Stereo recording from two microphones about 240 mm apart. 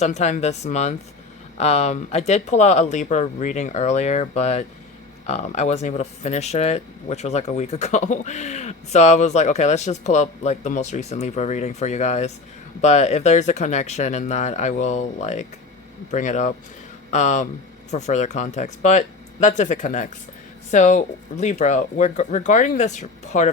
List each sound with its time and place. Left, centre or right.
0.0 s speech: left